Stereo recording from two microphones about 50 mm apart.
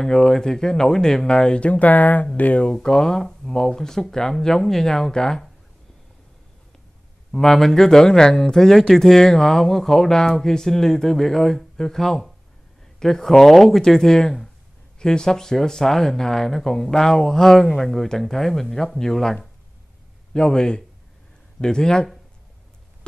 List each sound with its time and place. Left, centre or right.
0.0 s speech: centre; by 2.7 s left
2.7 s speech: centre
7.3 s speech: centre